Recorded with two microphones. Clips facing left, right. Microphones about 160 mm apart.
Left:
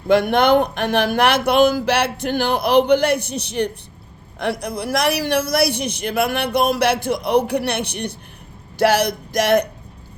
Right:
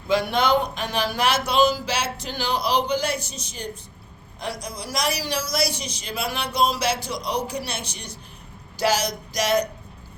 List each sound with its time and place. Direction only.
0.1 s a man's voice: 55° left (ahead or behind)